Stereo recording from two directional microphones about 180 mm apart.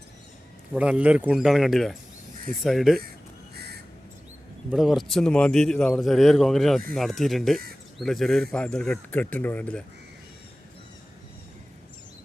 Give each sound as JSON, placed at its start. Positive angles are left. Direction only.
{"t": 0.8, "sound": "a man's voice", "side_deg": -5}
{"t": 3.5, "sound": "bird", "side_deg": -60}
{"t": 4.7, "sound": "a man's voice", "side_deg": 0}